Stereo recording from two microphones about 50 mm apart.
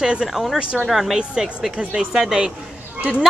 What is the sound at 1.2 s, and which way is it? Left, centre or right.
Speech, centre.